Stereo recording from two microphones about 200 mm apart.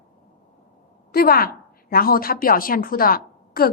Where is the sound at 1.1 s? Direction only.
50° left (ahead or behind).